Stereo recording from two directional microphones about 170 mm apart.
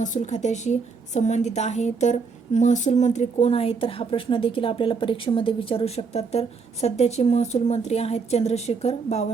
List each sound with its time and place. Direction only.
0.0 s a woman's voice: 45° left (ahead or behind)